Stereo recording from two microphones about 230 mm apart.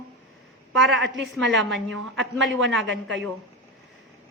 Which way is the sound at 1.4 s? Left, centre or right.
Right.